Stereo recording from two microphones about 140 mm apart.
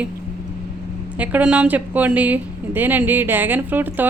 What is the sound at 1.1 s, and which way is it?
A woman's voice, 10° right (ahead or behind).